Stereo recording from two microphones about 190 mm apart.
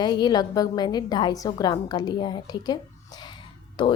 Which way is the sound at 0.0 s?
20° left (ahead or behind).